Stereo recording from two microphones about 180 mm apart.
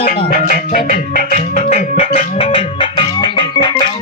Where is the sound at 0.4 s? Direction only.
50° left (ahead or behind).